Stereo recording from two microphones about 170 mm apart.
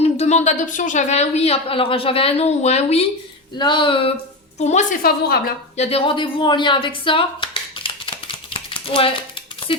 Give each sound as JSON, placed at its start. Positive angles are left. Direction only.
{"t": 0.0, "sound": "a woman's voice", "side_deg": 40}
{"t": 4.6, "sound": "a woman's voice", "side_deg": 45}
{"t": 5.0, "sound": "a woman's voice", "side_deg": 60}
{"t": 5.7, "sound": "a sound", "side_deg": 35}